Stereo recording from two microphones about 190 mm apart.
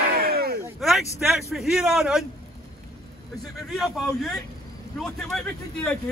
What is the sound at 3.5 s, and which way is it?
A man's voice, centre (ahead or behind).